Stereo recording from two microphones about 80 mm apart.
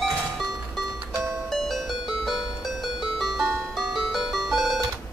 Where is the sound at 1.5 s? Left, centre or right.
Centre.